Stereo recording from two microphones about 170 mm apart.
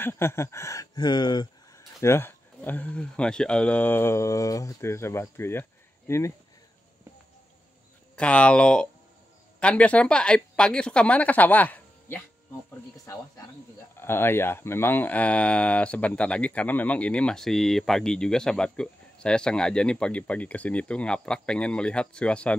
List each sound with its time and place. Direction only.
0.0 s speech: 15° left (ahead or behind)
8.2 s speech: 5° left (ahead or behind)